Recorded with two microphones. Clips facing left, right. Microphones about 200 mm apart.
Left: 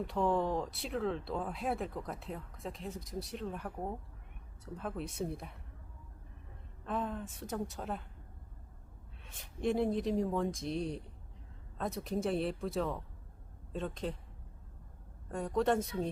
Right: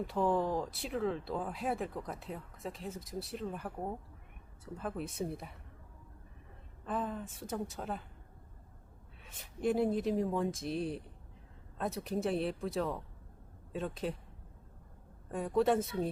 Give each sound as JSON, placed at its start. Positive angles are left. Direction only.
{"t": 0.0, "sound": "speech", "side_deg": 0}
{"t": 6.8, "sound": "speech", "side_deg": 0}
{"t": 9.2, "sound": "speech", "side_deg": 0}
{"t": 15.3, "sound": "speech", "side_deg": -5}